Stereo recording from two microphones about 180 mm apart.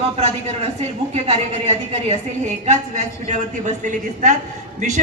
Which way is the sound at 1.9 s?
35° right (ahead or behind).